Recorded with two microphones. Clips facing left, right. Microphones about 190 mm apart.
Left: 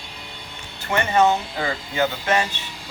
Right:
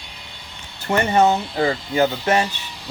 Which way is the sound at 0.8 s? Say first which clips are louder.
Right 2 dB; 35° right (ahead or behind).